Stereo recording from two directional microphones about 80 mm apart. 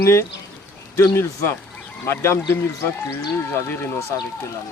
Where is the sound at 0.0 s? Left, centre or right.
Left.